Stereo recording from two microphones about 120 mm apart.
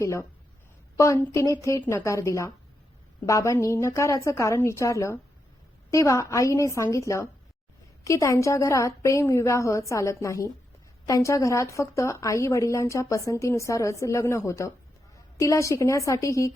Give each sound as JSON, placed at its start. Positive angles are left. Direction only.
{"t": 0.0, "sound": "a woman's voice", "side_deg": 25}